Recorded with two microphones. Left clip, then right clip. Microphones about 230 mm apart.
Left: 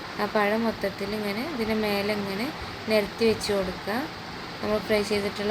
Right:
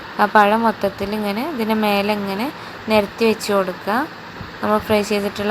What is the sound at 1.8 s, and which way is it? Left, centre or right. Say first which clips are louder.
A woman's voice: right 8 dB; right.